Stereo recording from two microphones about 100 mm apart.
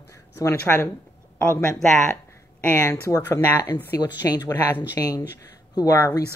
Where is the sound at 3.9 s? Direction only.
40° left (ahead or behind).